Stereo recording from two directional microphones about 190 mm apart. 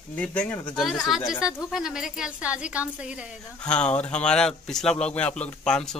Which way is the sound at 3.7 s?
5° left (ahead or behind).